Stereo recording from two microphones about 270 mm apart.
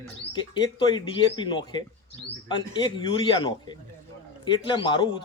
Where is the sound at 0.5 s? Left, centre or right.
Centre.